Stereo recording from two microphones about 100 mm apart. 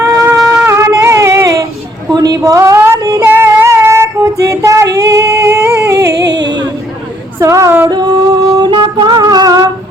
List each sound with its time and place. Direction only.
0.0 s shofar: 30° right (ahead or behind)
0.5 s music: 25° right (ahead or behind)
2.1 s a sound: 40° right (ahead or behind)
3.2 s child singing: 20° right (ahead or behind)
7.3 s female singing: 30° right (ahead or behind)
7.9 s music: 45° right (ahead or behind)